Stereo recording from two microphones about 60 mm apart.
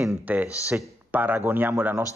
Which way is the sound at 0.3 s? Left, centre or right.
Right.